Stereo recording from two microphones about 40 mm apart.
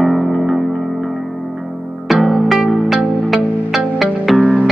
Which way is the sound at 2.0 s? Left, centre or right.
Centre.